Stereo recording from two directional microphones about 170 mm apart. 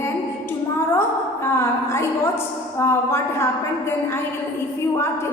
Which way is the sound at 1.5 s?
15° left (ahead or behind).